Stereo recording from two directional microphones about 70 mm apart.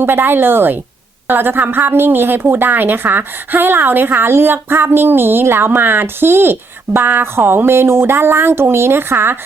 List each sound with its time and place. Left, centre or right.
0.0 s speech: right